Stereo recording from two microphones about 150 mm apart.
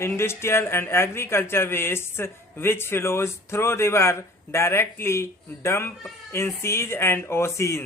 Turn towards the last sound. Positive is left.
turn(degrees=20)  # may be behind; listen again after turning